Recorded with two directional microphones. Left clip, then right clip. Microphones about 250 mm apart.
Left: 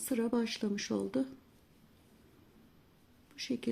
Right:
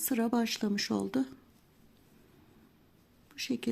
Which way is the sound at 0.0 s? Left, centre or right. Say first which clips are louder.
Right 2 dB; right.